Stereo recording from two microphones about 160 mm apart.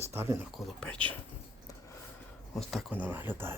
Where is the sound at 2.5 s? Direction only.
Centre (ahead or behind).